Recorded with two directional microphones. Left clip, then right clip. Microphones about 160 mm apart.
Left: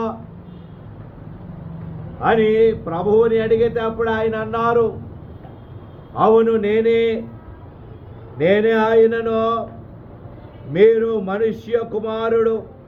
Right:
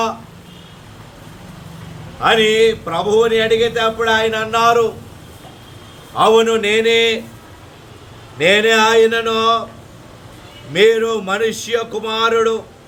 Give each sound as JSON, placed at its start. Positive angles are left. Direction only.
{"t": 2.2, "sound": "speech", "side_deg": -15}
{"t": 6.1, "sound": "speech", "side_deg": -15}
{"t": 8.4, "sound": "speech", "side_deg": -15}
{"t": 10.7, "sound": "speech", "side_deg": -15}